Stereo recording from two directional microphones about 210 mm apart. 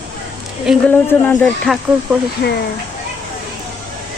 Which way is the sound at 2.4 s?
45° left (ahead or behind).